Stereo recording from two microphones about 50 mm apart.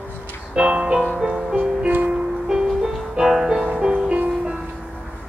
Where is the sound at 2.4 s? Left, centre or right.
Centre.